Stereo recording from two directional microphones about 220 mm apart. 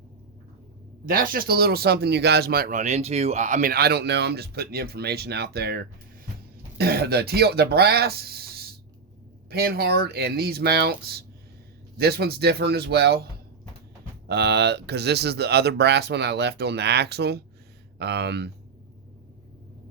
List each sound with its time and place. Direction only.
1.0 s speech: 40° right (ahead or behind)
14.3 s speech: 50° right (ahead or behind)